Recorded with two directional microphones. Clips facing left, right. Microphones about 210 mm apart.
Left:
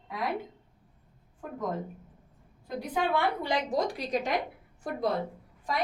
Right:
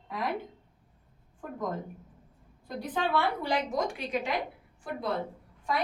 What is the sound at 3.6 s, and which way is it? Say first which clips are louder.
Speech: left 2 dB; 35° left (ahead or behind).